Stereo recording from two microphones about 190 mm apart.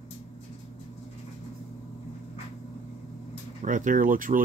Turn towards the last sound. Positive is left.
turn(degrees=-45)  # may be behind; listen again after turning